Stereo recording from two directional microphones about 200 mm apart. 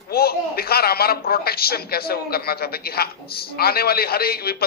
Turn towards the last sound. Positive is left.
turn(degrees=50)  # may be behind; listen again after turning